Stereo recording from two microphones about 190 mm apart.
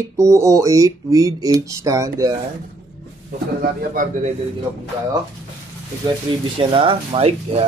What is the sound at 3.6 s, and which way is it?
Speech, 45° right (ahead or behind).